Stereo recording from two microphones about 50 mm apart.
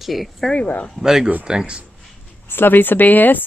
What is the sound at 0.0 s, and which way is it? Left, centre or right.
Speech, centre.